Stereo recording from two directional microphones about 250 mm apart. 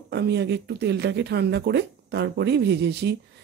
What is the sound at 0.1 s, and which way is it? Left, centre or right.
Speech, right.